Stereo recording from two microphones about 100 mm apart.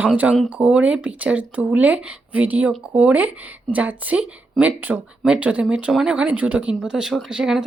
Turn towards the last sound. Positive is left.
turn(degrees=-5)  # may be behind; listen again after turning